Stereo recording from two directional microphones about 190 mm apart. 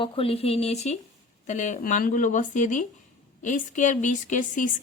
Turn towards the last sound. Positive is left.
turn(degrees=40)  # may be behind; listen again after turning